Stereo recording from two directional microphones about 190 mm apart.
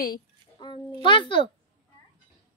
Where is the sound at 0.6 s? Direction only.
25° left (ahead or behind).